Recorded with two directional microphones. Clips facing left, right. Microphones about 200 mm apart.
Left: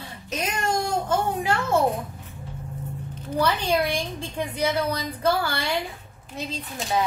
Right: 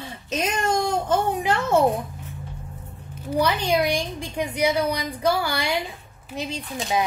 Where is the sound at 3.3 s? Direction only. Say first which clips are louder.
Right 2 dB; 15° right (ahead or behind).